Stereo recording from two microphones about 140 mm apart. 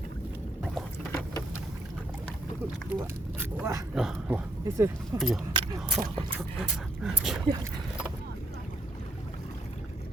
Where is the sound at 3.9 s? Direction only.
5° right (ahead or behind).